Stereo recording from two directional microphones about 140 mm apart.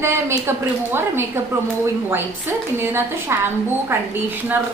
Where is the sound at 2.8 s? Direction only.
20° right (ahead or behind).